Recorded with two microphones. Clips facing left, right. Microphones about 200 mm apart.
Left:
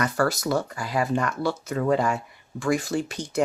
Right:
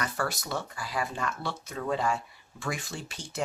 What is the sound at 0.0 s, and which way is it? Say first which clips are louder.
Speech: left 9 dB; 60° left (ahead or behind).